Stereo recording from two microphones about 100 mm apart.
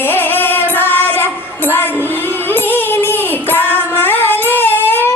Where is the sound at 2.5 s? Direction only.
20° left (ahead or behind).